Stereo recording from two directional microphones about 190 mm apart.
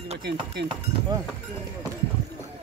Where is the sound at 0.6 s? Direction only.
65° right (ahead or behind).